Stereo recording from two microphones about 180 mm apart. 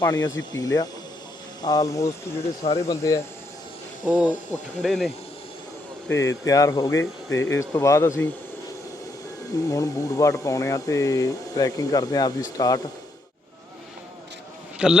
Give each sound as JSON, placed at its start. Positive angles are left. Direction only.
{"t": 0.0, "sound": "speech", "side_deg": 15}
{"t": 2.6, "sound": "speech", "side_deg": 35}
{"t": 2.9, "sound": "speech", "side_deg": 15}
{"t": 4.0, "sound": "speech", "side_deg": -5}
{"t": 6.1, "sound": "speech", "side_deg": 15}
{"t": 9.6, "sound": "speech", "side_deg": 20}
{"t": 14.8, "sound": "speech", "side_deg": -5}